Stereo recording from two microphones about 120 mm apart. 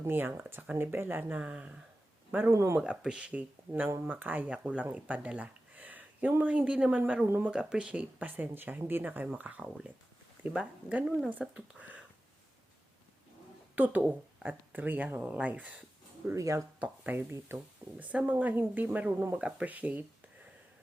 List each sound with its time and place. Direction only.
0.0 s speech: 20° right (ahead or behind)
2.3 s speech: 20° right (ahead or behind)
2.7 s speech: 10° right (ahead or behind)
13.7 s speech: 15° right (ahead or behind)
16.2 s speech: 25° right (ahead or behind)
16.8 s speech: 15° right (ahead or behind)